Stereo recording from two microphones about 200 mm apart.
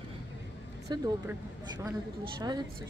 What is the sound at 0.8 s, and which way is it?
Speech, 15° right (ahead or behind).